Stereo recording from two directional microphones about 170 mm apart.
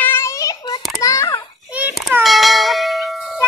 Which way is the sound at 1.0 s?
20° left (ahead or behind).